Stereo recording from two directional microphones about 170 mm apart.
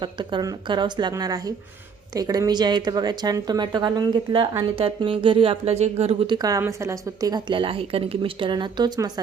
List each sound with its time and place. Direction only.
0.0 s speech: 30° right (ahead or behind)